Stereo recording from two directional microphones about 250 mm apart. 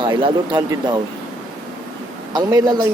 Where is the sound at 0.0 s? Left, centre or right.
Centre.